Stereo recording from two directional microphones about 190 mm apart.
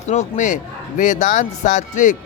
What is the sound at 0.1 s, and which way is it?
Speech, 40° left (ahead or behind).